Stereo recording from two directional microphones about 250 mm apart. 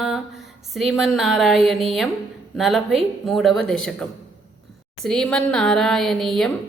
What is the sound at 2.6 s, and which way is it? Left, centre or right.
A woman's voice, centre.